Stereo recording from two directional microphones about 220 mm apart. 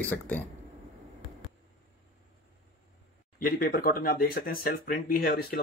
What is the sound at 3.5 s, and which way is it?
Speech, 40° left (ahead or behind).